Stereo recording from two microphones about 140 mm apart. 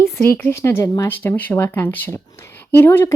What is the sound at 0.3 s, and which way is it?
Speech, 15° left (ahead or behind).